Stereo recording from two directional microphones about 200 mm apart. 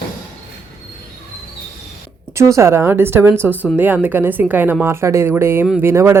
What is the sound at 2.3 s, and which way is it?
Speech, 15° right (ahead or behind).